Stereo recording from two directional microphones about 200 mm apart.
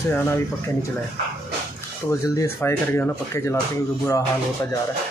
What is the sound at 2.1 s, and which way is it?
Speech, 15° left (ahead or behind).